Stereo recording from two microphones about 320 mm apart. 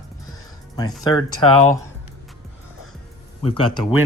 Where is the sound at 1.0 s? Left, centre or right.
Centre.